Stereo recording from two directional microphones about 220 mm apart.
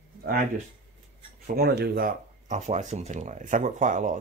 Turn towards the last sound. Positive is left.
turn(degrees=-35)  # may be behind; listen again after turning